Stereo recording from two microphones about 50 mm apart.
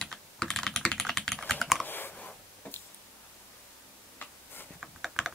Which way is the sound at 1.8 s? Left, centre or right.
Left.